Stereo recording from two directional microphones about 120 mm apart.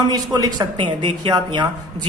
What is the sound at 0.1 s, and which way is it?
A woman's voice, 30° right (ahead or behind).